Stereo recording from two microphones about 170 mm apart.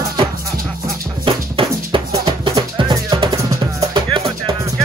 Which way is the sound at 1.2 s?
30° right (ahead or behind).